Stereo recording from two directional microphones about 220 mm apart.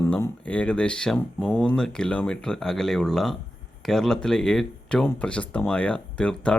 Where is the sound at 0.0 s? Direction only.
10° left (ahead or behind).